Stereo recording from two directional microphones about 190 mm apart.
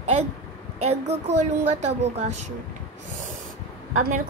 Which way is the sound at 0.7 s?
35° right (ahead or behind).